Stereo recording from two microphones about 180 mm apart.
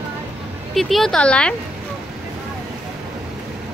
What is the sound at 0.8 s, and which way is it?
Speech, centre (ahead or behind).